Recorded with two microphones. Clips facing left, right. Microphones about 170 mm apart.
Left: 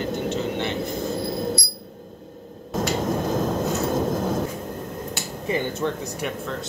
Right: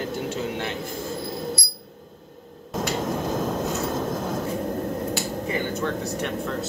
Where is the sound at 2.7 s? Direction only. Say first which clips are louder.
Left 2 dB; centre (ahead or behind).